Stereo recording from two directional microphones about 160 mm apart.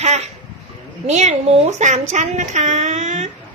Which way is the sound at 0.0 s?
45° right (ahead or behind).